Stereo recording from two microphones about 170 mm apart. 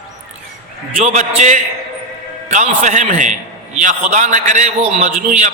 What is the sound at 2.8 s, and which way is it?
A man's voice, 45° right (ahead or behind).